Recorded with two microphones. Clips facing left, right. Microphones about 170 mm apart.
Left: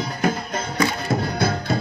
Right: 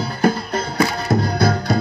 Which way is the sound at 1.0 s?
40° right (ahead or behind).